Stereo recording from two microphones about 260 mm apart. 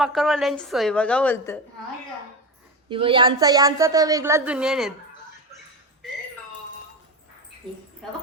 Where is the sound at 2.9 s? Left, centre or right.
Centre.